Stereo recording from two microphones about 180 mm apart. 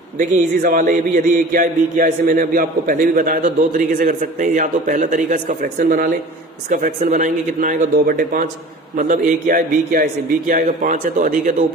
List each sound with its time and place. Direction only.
0.2 s speech: 50° right (ahead or behind)